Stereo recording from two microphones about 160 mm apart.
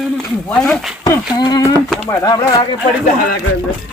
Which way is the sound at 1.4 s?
25° left (ahead or behind).